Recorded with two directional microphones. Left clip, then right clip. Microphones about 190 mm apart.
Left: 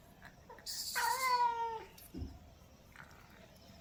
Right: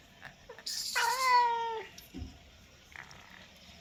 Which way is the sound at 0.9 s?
35° right (ahead or behind).